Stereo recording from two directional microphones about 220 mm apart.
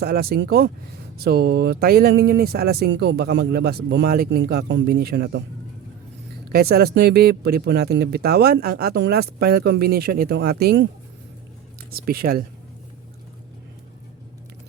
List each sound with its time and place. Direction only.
0.0 s speech: 45° right (ahead or behind)
6.5 s speech: 45° right (ahead or behind)
11.9 s speech: 45° right (ahead or behind)